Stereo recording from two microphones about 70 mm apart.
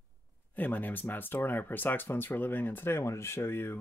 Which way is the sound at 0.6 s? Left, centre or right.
Left.